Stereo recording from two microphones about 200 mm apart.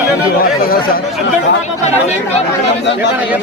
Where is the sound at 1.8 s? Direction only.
35° left (ahead or behind).